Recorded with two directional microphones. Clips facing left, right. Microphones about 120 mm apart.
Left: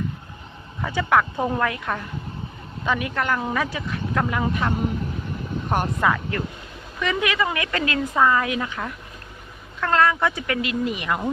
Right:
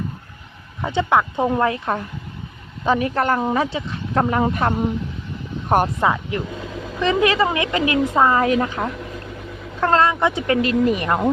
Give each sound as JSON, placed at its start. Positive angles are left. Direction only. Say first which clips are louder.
{"t": 0.8, "sound": "speech", "louder": "right 2 dB", "side_deg": -25}
{"t": 6.0, "sound": "speech", "louder": "right 2 dB", "side_deg": -20}
{"t": 8.1, "sound": "speech", "louder": "right 2 dB", "side_deg": -30}
{"t": 10.1, "sound": "speech", "louder": "right 3 dB", "side_deg": -20}
{"t": 10.4, "sound": "speech", "louder": "right 7 dB", "side_deg": -35}